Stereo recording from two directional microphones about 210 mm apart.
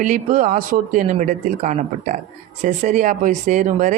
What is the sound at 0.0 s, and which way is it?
Speech, 40° right (ahead or behind).